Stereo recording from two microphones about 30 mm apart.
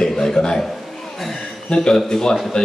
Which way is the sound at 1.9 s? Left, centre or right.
Centre.